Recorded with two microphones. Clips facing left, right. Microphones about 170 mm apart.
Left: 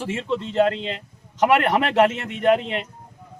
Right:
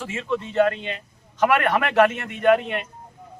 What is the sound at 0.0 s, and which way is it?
Speech, 25° left (ahead or behind).